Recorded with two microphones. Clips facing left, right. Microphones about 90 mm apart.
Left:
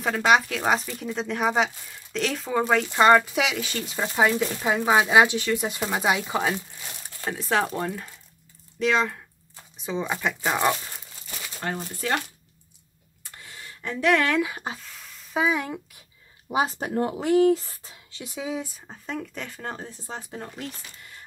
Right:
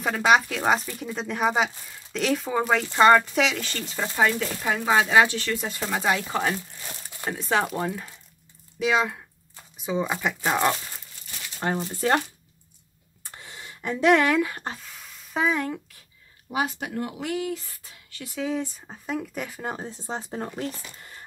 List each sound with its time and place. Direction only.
0.0 s speech: centre (ahead or behind)
11.6 s speech: 25° right (ahead or behind)
13.2 s a sound: 25° right (ahead or behind)
14.3 s speech: 5° left (ahead or behind)
16.4 s speech: 25° left (ahead or behind); by 18.7 s 10° left (ahead or behind)
18.9 s speech: 5° right (ahead or behind); by 20.2 s 25° right (ahead or behind)
20.2 s speech: 35° right (ahead or behind)